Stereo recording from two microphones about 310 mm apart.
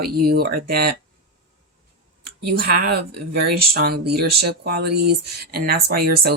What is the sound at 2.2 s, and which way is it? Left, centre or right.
Speech, right.